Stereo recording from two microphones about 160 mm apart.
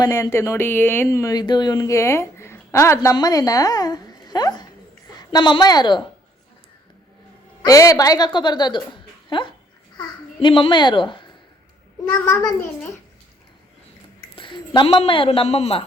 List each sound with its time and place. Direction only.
0.0 s a woman's voice: 20° left (ahead or behind)
7.6 s a woman's voice: 20° left (ahead or behind)
12.2 s a child's voice: 15° left (ahead or behind)
14.3 s a woman's voice: 30° left (ahead or behind)